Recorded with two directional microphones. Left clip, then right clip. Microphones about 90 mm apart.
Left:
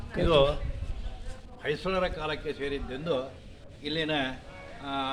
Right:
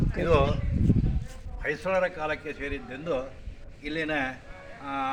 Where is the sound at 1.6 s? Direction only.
10° left (ahead or behind).